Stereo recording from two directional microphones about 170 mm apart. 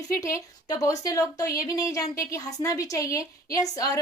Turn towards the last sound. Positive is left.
turn(degrees=20)  # may be behind; listen again after turning